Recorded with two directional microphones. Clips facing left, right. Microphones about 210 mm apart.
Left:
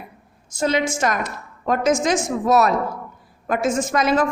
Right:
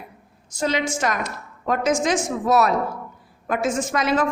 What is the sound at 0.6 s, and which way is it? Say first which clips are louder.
A woman's voice: left 2 dB; 45° left (ahead or behind).